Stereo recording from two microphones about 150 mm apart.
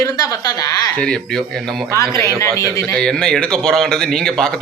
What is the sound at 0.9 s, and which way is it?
Speech, 5° left (ahead or behind).